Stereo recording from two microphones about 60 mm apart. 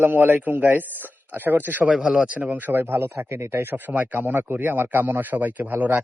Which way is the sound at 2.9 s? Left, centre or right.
Right.